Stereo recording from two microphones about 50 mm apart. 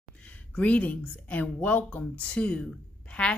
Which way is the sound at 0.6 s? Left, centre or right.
Left.